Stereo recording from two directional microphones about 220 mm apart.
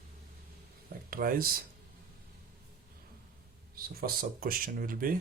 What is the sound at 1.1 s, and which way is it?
Speech, 40° right (ahead or behind).